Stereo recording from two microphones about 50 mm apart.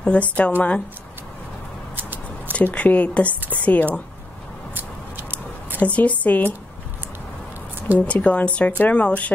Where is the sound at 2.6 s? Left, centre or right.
Left.